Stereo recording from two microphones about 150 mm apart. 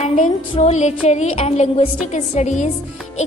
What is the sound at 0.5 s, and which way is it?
A woman's voice, 50° left (ahead or behind).